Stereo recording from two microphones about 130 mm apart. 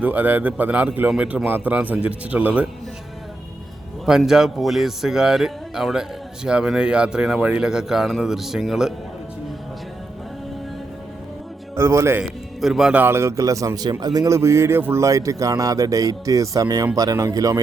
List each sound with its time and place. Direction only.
0.0 s a man's voice: 15° right (ahead or behind)
4.0 s speech: 5° right (ahead or behind)
11.8 s speech: 20° right (ahead or behind)
12.2 s speech: 5° right (ahead or behind); by 17.6 s 25° right (ahead or behind)